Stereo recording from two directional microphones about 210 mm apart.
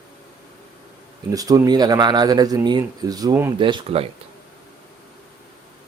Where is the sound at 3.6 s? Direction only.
25° right (ahead or behind).